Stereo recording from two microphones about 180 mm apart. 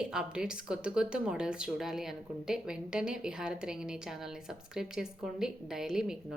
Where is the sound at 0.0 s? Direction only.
5° right (ahead or behind).